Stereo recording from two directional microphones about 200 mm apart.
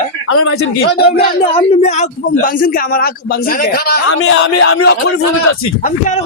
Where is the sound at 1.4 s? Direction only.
30° left (ahead or behind); by 4.0 s 50° left (ahead or behind).